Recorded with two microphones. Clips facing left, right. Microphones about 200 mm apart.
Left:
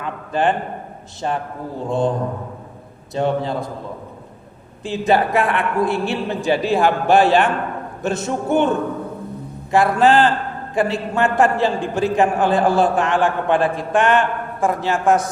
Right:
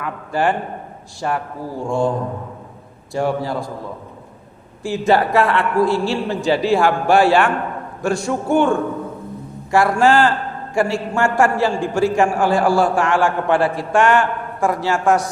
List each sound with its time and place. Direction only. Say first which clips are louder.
0.0 s a sound: even; 20° left (ahead or behind)
1.2 s a man's voice: right 1 dB; 25° left (ahead or behind)
4.8 s a man's voice: right 1 dB; 20° left (ahead or behind)